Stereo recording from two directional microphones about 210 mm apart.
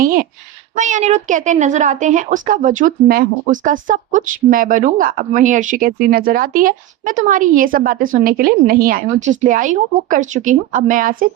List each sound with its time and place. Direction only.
0.0 s speech: 40° right (ahead or behind)